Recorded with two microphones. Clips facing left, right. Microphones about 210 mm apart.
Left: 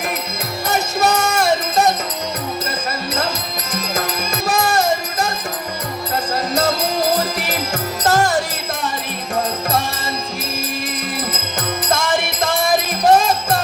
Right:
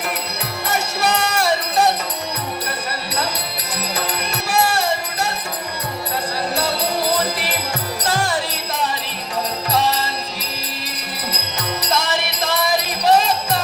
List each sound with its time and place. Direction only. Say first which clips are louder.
0.7 s music: left 3 dB; 40° left (ahead or behind)
6.3 s music: left 5 dB; 45° left (ahead or behind)
11.9 s music: left 3 dB; 50° left (ahead or behind)